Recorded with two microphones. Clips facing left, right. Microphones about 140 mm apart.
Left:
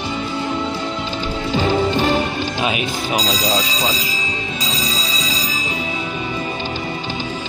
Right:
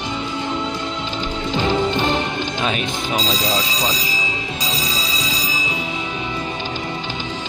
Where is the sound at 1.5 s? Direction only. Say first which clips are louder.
Left 2 dB; 10° left (ahead or behind).